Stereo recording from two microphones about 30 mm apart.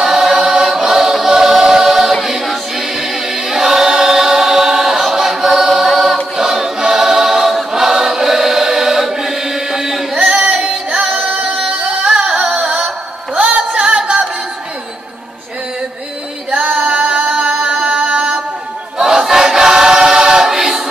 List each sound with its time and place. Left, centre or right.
0.0 s choir: centre
2.4 s choir: centre
3.0 s choir: centre
7.7 s chant: centre
10.4 s music: right
10.7 s music: right
11.2 s music: right
11.5 s music: right
12.5 s music: right
16.8 s music: right
17.3 s chant: right
18.9 s choir: centre